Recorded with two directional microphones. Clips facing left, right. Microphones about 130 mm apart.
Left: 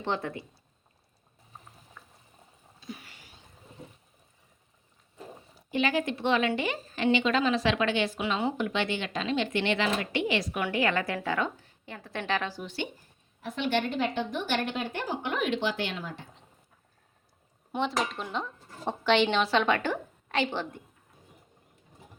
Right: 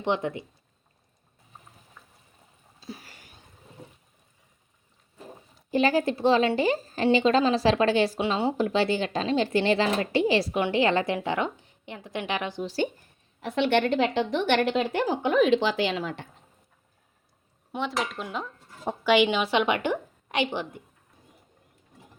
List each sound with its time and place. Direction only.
0.0 s speech: 15° right (ahead or behind)
2.8 s a sound: 35° right (ahead or behind)
5.7 s a woman's voice: 35° right (ahead or behind); by 12.6 s 20° right (ahead or behind)
12.6 s a woman's voice: 40° right (ahead or behind)
13.4 s a woman's voice: 70° right (ahead or behind)
17.7 s a woman's voice: centre (ahead or behind)